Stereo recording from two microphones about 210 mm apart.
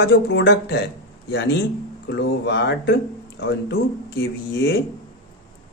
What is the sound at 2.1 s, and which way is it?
Speech, 55° left (ahead or behind).